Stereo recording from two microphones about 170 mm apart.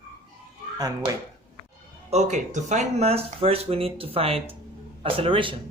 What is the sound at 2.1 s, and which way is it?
Speech, 40° right (ahead or behind).